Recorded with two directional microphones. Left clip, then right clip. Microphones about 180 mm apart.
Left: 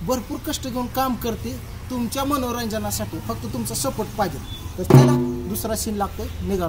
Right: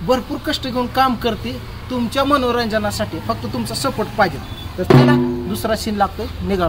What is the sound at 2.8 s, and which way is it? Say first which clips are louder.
Speech: right 7 dB; 20° right (ahead or behind).